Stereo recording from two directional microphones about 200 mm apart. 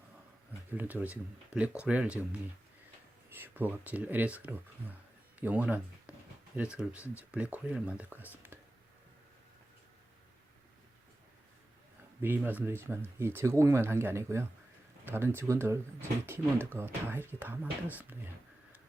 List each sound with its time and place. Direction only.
0.7 s speech: 10° right (ahead or behind)
3.2 s speech: 10° right (ahead or behind)
12.2 s speech: 10° right (ahead or behind)